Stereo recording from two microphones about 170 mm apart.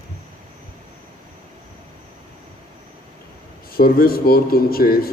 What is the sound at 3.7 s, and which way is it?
Speech, 60° left (ahead or behind).